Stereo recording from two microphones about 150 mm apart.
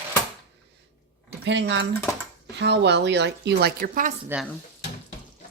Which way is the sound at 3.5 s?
80° right.